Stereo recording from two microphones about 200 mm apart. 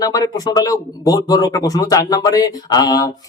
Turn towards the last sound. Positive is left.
turn(degrees=20)  # may be behind; listen again after turning